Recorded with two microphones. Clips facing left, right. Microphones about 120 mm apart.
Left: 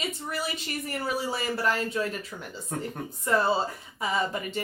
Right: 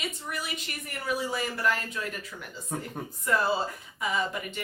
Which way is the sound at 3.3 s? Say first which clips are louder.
Left 2 dB; 25° left (ahead or behind).